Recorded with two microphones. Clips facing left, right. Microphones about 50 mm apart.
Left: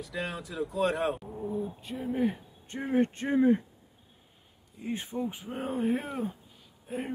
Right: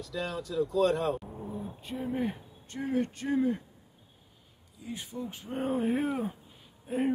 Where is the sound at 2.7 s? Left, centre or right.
Left.